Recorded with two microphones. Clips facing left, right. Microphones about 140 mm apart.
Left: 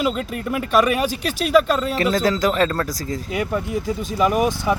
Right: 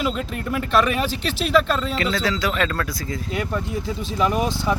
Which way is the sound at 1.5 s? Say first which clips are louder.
Left 3 dB; 10° left (ahead or behind).